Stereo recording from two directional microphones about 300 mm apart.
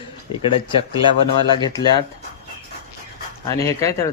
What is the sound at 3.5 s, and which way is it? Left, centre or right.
Speech, centre.